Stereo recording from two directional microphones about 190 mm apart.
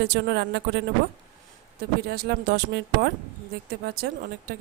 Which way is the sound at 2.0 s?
60° right (ahead or behind).